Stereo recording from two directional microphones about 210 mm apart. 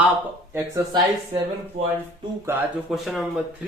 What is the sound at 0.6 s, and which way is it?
Speech, 15° right (ahead or behind).